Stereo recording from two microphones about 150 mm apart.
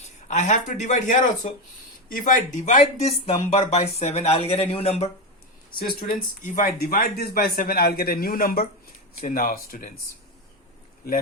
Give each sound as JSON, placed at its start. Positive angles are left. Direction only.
{"t": 0.3, "sound": "speech", "side_deg": 55}
{"t": 6.4, "sound": "speech", "side_deg": 60}